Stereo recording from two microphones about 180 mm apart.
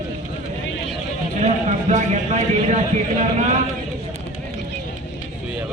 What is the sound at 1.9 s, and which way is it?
Speech, 45° right (ahead or behind).